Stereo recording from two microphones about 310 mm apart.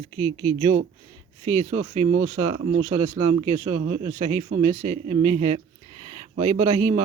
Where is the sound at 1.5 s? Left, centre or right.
Right.